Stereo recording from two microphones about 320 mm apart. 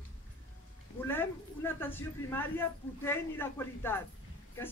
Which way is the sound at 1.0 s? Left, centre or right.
Centre.